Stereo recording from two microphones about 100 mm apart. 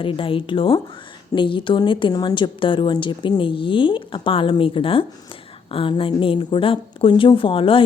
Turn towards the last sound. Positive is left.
turn(degrees=60)  # may be behind; listen again after turning